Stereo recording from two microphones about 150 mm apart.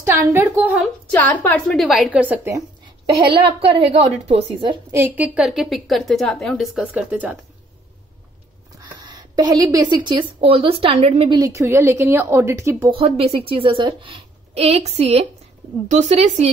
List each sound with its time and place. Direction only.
0.0 s a woman's voice: 15° right (ahead or behind)
1.5 s a woman's voice: centre (ahead or behind)
3.3 s a woman's voice: 35° right (ahead or behind)
4.9 s a woman's voice: 10° right (ahead or behind)
9.0 s a woman's voice: 25° right (ahead or behind)
12.9 s a woman's voice: 40° right (ahead or behind)